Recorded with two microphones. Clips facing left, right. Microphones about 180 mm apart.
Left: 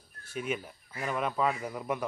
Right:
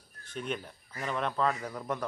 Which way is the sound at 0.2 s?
10° left (ahead or behind).